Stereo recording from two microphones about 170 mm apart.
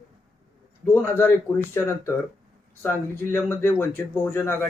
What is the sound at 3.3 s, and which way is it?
A man's voice, 15° left (ahead or behind).